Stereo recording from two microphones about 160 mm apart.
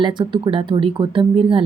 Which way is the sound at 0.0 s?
30° right (ahead or behind).